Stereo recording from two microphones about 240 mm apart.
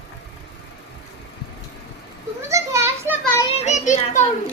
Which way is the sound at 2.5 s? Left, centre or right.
Centre.